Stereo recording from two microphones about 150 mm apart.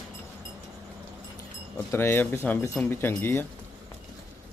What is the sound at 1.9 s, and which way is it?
Speech, 15° left (ahead or behind).